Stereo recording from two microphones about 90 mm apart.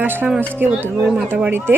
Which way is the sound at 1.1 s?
10° right (ahead or behind).